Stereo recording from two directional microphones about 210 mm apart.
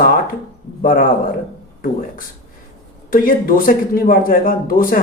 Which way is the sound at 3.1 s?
40° left (ahead or behind).